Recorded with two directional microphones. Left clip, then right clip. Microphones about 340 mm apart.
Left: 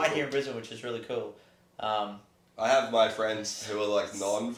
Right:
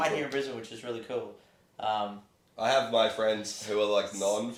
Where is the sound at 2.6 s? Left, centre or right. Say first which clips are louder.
Left 1 dB; right.